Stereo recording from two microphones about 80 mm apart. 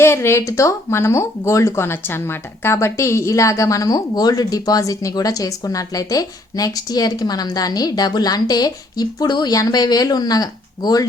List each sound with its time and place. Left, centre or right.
0.0 s speech: left